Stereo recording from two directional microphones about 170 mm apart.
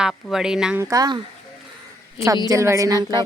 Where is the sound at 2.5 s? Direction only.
20° right (ahead or behind).